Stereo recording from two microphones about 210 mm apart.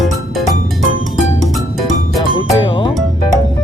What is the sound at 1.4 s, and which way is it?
Music, centre (ahead or behind).